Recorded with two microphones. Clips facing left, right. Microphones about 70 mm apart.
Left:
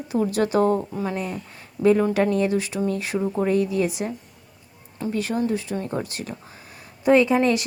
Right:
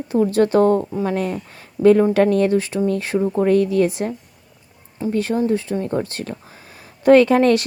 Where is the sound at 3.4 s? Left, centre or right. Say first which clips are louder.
Right 6 dB; right.